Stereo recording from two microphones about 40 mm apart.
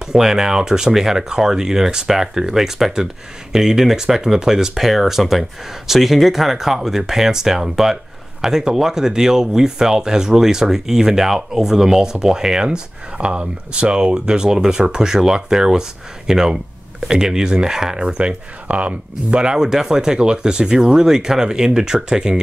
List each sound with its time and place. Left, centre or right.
0.0 s speech: centre
12.6 s speech: right